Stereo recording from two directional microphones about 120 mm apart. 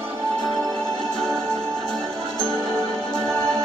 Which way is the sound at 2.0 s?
35° right (ahead or behind).